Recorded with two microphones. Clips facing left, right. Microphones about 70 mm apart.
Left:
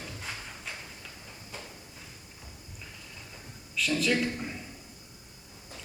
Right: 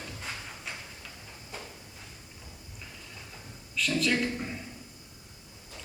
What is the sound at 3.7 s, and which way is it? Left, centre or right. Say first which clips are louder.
Speech: even; centre.